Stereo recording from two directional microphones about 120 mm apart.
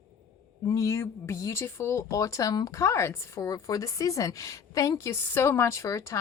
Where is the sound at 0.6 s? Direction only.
30° left (ahead or behind).